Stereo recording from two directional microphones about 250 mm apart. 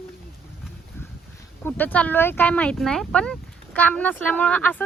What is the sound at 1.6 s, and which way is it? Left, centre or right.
Speech, centre.